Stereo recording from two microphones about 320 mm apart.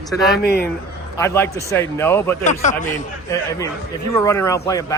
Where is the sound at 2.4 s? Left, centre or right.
Left.